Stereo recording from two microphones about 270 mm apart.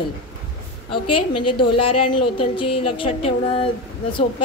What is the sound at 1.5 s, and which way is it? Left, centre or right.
A woman's voice, centre.